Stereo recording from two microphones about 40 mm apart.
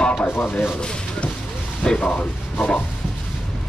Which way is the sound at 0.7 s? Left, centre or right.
Left.